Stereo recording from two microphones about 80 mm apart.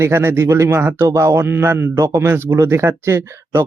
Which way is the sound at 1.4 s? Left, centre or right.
Right.